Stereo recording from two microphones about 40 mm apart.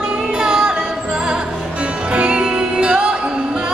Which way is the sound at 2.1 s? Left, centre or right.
Right.